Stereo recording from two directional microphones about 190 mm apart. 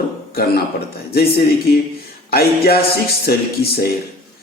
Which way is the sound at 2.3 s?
55° left (ahead or behind).